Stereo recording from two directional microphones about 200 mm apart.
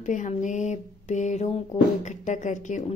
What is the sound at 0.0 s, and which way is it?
Speech, 40° left (ahead or behind).